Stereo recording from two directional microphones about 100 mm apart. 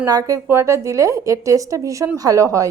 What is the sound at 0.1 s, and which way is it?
A woman's voice, 35° right (ahead or behind).